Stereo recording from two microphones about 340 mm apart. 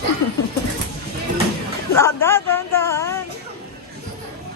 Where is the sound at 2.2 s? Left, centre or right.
Centre.